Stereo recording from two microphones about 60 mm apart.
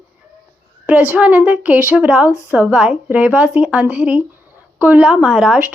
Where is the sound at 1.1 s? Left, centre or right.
Centre.